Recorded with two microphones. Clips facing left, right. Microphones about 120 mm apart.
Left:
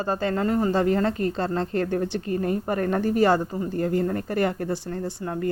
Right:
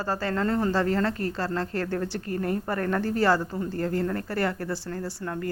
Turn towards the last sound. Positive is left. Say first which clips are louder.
# left 3 dB
turn(degrees=20)  # may be behind; listen again after turning